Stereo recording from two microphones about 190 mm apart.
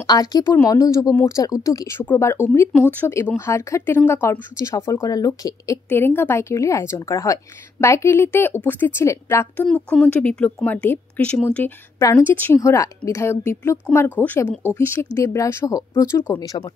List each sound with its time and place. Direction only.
0.0 s speech: 20° left (ahead or behind)